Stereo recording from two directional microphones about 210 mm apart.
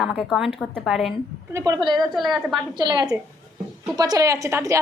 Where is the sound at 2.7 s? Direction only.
20° right (ahead or behind).